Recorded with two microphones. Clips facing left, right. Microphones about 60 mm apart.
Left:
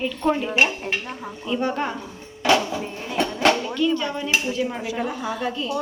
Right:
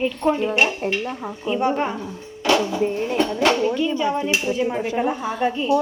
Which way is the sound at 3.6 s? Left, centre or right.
Right.